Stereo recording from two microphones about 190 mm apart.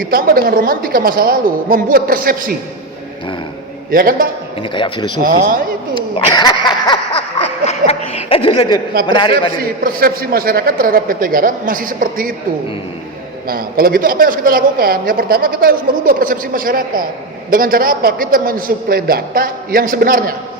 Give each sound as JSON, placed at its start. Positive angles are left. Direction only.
{"t": 0.0, "sound": "a woman's voice", "side_deg": -50}
{"t": 3.9, "sound": "a woman's voice", "side_deg": -50}
{"t": 4.6, "sound": "speech", "side_deg": 25}
{"t": 5.2, "sound": "a woman's voice", "side_deg": -50}
{"t": 6.1, "sound": "speech", "side_deg": 20}
{"t": 7.6, "sound": "speech", "side_deg": 30}
{"t": 9.8, "sound": "a woman's voice", "side_deg": -50}
{"t": 13.5, "sound": "a woman's voice", "side_deg": -50}